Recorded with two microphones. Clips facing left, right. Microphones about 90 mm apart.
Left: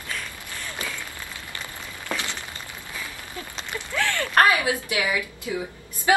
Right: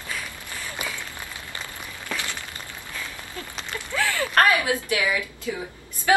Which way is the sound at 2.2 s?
20° left (ahead or behind).